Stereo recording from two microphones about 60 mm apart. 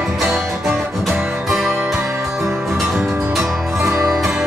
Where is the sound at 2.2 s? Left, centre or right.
Centre.